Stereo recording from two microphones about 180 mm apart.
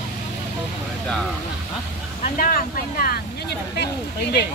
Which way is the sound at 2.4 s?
50° left (ahead or behind).